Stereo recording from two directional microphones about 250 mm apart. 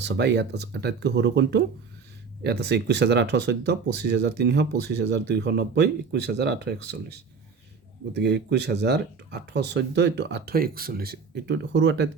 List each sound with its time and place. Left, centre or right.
0.0 s speech: right